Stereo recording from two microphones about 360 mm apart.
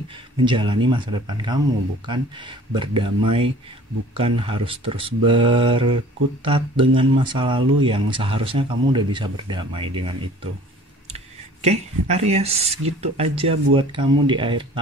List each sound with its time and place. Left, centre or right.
0.5 s speech: centre